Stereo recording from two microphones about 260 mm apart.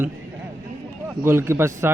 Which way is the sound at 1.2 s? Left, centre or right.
Centre.